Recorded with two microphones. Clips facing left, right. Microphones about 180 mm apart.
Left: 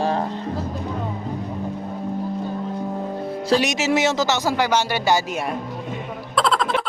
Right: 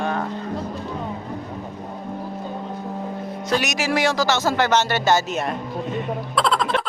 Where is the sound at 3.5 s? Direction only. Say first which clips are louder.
Left 3 dB; 30° left (ahead or behind); by 5.2 s 10° left (ahead or behind).